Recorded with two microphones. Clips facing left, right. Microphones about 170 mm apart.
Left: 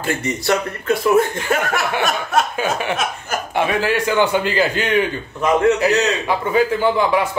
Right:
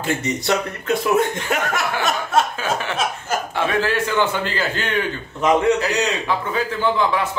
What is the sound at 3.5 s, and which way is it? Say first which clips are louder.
A man's voice: left 3 dB; 15° left (ahead or behind).